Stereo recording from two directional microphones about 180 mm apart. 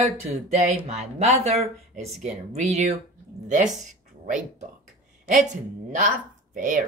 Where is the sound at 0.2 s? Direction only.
40° right (ahead or behind).